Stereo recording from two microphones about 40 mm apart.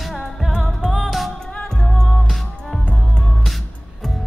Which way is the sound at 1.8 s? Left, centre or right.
Centre.